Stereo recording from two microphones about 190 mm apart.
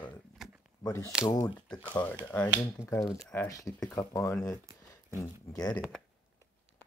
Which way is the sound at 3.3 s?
15° left (ahead or behind).